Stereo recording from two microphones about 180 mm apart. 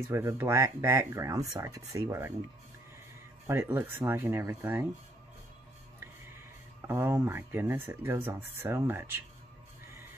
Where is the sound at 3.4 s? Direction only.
15° right (ahead or behind).